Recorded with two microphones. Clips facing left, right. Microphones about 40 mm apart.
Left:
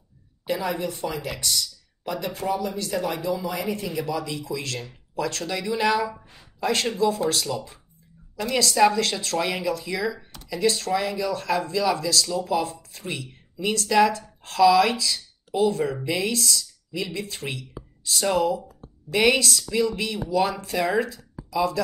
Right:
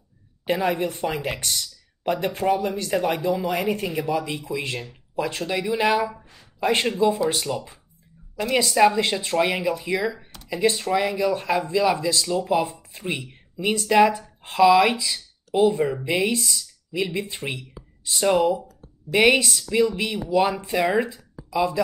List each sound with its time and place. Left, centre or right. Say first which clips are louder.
0.5 s speech: right 4 dB; right